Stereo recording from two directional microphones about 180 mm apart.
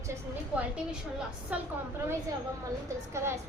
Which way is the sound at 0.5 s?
5° right (ahead or behind).